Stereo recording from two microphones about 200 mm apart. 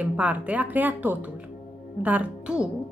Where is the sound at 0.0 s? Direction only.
5° right (ahead or behind).